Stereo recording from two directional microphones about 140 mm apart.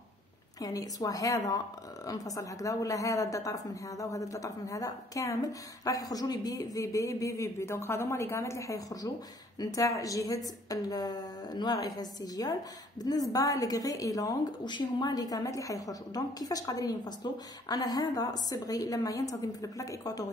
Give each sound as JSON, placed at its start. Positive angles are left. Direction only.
{"t": 0.6, "sound": "a woman's voice", "side_deg": 25}